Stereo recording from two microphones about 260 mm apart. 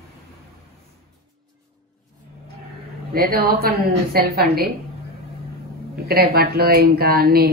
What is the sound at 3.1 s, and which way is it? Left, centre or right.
A woman's voice, right.